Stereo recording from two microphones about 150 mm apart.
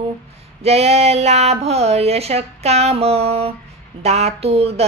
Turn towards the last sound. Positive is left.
turn(degrees=-40)  # may be behind; listen again after turning